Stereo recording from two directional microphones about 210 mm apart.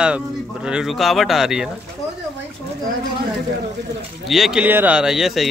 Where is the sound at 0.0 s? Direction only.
5° right (ahead or behind).